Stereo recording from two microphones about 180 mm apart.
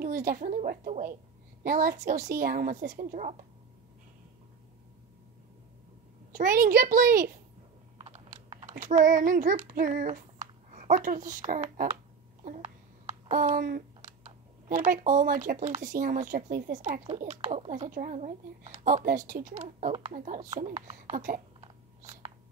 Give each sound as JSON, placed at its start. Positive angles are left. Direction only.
{"t": 0.0, "sound": "a woman's voice", "side_deg": -50}
{"t": 6.3, "sound": "a woman's voice", "side_deg": -50}
{"t": 8.0, "sound": "a child's voice", "side_deg": -35}
{"t": 12.4, "sound": "a sound", "side_deg": -35}
{"t": 14.0, "sound": "speech", "side_deg": -35}
{"t": 19.0, "sound": "a woman's voice", "side_deg": -50}
{"t": 21.1, "sound": "a woman's voice", "side_deg": -45}
{"t": 21.5, "sound": "biting", "side_deg": -35}